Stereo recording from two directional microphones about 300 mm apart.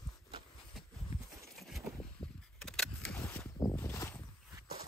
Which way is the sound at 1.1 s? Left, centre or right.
Centre.